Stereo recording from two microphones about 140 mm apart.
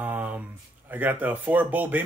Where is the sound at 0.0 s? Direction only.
15° right (ahead or behind).